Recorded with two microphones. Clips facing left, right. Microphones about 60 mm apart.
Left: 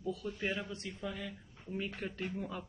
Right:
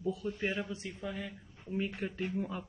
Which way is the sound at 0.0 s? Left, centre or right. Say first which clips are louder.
Right 3 dB; centre.